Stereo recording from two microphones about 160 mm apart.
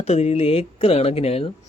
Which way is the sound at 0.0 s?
40° left (ahead or behind).